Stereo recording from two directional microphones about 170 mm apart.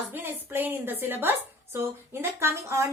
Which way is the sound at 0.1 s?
10° right (ahead or behind).